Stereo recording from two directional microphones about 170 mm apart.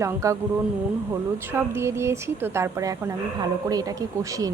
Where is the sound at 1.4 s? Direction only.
15° right (ahead or behind).